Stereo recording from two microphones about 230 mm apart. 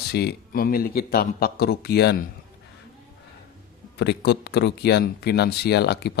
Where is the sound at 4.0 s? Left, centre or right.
Left.